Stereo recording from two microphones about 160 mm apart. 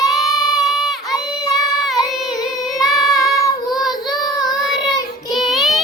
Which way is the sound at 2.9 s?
20° left (ahead or behind).